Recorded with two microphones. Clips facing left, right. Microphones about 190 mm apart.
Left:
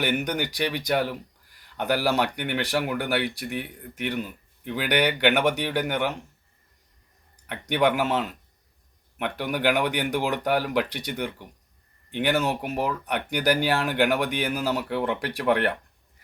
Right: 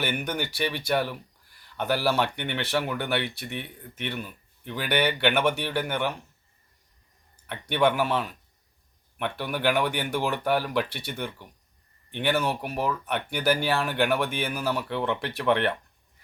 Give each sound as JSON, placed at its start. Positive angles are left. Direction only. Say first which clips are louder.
{"t": 0.0, "sound": "speech", "louder": "left 3 dB", "side_deg": 15}
{"t": 7.4, "sound": "speech", "louder": "left 1 dB", "side_deg": 15}